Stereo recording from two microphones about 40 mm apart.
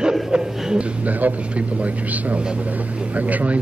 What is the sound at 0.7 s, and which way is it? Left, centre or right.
A man's voice, right.